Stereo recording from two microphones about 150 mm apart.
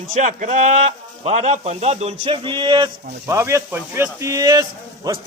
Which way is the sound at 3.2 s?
20° right (ahead or behind).